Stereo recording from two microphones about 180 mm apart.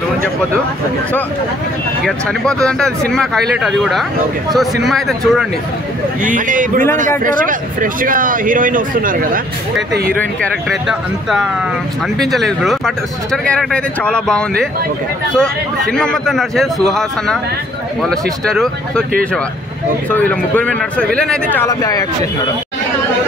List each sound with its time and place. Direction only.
2.0 s speech: 5° left (ahead or behind)
6.2 s speech: 45° right (ahead or behind)
10.4 s speech: centre (ahead or behind)
20.1 s speech: 10° left (ahead or behind)
21.6 s speech: 20° left (ahead or behind)